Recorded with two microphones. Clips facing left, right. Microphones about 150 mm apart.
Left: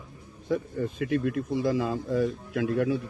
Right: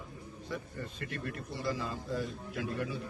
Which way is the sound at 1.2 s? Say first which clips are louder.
Left 10 dB; 90° left.